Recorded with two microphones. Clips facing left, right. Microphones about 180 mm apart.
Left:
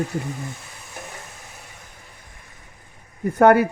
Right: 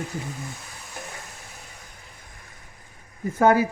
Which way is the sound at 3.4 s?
60° left (ahead or behind).